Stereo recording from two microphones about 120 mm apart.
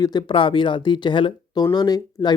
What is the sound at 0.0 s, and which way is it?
Speech, 35° left (ahead or behind).